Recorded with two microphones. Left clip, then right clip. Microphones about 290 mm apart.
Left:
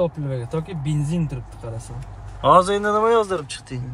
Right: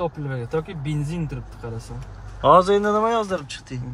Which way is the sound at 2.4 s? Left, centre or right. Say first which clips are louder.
Even; centre.